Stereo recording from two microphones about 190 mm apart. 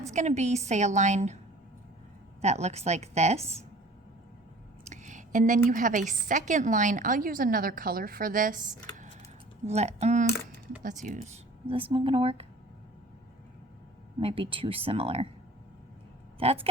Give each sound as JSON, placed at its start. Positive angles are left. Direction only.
{"t": 0.1, "sound": "a woman's voice", "side_deg": -40}
{"t": 2.4, "sound": "a woman's voice", "side_deg": -35}
{"t": 4.9, "sound": "a woman's voice", "side_deg": -40}
{"t": 11.6, "sound": "speech", "side_deg": -30}
{"t": 14.2, "sound": "speech", "side_deg": -30}
{"t": 16.4, "sound": "a woman's voice", "side_deg": -30}